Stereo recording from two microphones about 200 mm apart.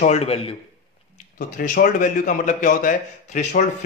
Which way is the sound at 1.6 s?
45° left (ahead or behind).